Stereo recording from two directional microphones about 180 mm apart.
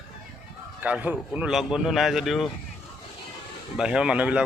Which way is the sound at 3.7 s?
5° right (ahead or behind).